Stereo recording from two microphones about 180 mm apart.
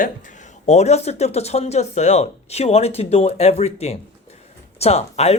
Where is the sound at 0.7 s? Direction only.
40° left (ahead or behind).